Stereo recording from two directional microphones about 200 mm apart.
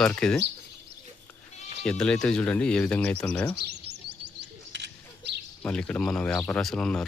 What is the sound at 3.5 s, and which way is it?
Speech, 55° right (ahead or behind).